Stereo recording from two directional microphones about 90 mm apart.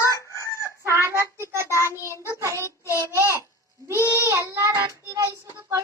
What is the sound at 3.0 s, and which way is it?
Babbling, 30° right (ahead or behind).